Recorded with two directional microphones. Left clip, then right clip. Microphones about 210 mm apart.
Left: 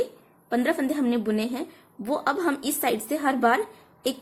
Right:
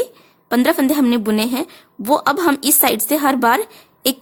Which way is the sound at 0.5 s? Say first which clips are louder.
Right 9 dB; 40° right (ahead or behind).